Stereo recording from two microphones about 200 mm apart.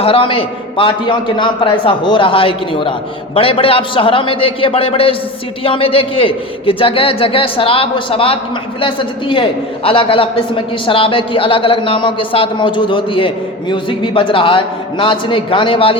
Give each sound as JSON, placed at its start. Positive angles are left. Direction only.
{"t": 0.0, "sound": "a man's voice", "side_deg": 25}